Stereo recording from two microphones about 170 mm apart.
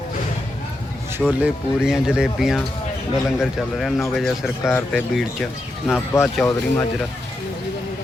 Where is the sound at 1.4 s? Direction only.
5° right (ahead or behind).